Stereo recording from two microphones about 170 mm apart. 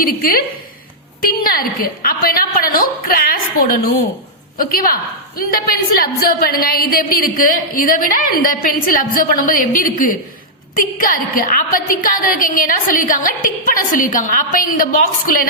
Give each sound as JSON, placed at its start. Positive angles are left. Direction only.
{"t": 0.0, "sound": "a woman's voice", "side_deg": 60}